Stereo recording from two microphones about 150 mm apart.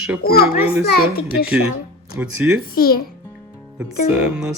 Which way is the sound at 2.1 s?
5° right (ahead or behind).